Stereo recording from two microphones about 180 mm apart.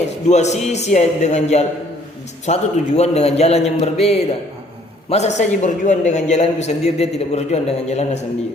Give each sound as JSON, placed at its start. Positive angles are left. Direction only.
{"t": 0.3, "sound": "a man's voice", "side_deg": 40}